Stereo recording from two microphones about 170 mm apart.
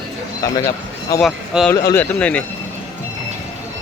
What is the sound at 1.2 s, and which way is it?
Speech, centre (ahead or behind).